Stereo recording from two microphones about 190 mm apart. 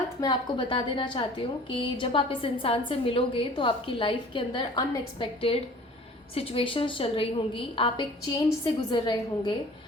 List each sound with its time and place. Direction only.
0.2 s a woman's voice: 25° left (ahead or behind)